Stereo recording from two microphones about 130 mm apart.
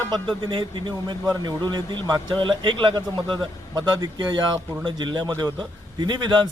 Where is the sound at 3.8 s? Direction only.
30° right (ahead or behind).